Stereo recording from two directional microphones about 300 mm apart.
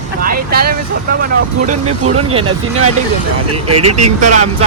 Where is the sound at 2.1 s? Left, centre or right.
Centre.